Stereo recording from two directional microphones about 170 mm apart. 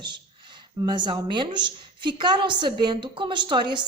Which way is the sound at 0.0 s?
25° right (ahead or behind).